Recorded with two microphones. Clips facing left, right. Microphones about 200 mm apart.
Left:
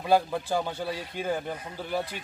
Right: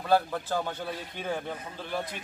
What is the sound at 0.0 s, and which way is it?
Speech, 10° left (ahead or behind).